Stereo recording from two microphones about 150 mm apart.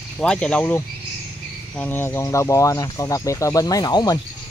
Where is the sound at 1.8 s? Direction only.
15° left (ahead or behind).